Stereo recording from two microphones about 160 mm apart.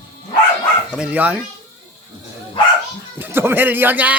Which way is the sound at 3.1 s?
15° right (ahead or behind).